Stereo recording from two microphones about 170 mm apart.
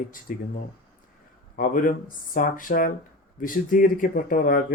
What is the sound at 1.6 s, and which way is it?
Speech, 50° left (ahead or behind).